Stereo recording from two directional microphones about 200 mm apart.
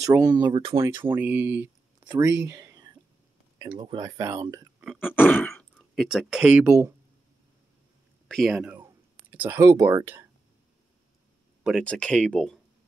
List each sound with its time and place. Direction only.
0.0 s speech: 15° right (ahead or behind)
0.8 s speech: 10° right (ahead or behind)
5.0 s speech: 10° left (ahead or behind); by 6.9 s 10° right (ahead or behind)
8.3 s speech: centre (ahead or behind)
11.6 s speech: 5° left (ahead or behind)